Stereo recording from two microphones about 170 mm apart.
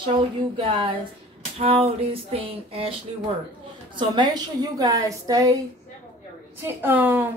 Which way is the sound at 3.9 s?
25° right (ahead or behind).